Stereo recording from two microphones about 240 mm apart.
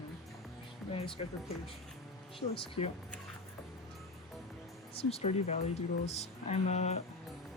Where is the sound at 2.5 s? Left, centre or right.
Left.